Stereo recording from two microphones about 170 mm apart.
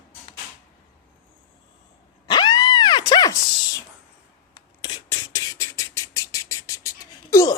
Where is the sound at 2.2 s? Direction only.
25° left (ahead or behind).